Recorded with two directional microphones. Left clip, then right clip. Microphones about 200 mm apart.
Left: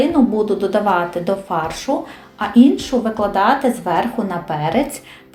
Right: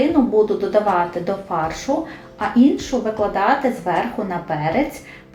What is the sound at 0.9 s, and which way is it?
Speech, 35° left (ahead or behind).